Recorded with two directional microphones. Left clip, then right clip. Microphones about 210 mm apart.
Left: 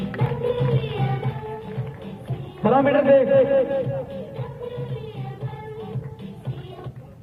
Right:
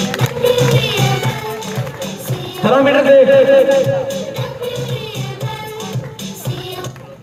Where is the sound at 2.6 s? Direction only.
50° right (ahead or behind).